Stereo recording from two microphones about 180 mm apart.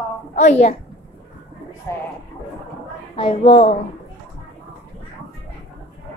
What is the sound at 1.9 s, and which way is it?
Speech, 20° left (ahead or behind).